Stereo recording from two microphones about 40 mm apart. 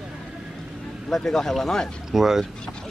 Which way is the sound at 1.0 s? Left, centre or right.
Centre.